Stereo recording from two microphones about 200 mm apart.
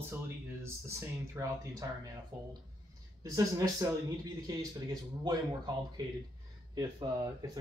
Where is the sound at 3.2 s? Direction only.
15° right (ahead or behind).